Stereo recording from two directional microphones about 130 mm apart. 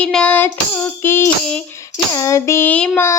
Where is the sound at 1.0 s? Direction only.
20° left (ahead or behind).